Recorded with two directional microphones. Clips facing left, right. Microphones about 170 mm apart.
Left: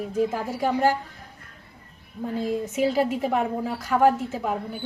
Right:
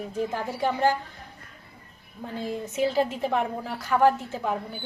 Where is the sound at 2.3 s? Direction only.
10° left (ahead or behind).